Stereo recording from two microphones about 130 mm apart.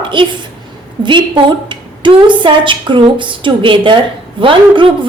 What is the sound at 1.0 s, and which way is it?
A woman's voice, 40° right (ahead or behind).